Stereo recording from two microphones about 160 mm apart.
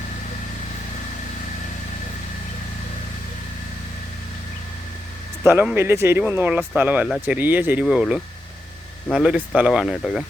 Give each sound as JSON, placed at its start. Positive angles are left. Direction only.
{"t": 5.7, "sound": "speech", "side_deg": -15}